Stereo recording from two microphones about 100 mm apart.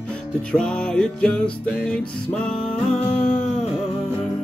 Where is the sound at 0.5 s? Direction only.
5° left (ahead or behind).